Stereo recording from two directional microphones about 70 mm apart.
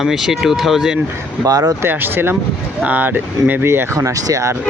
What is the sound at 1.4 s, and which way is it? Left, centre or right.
Speech, right.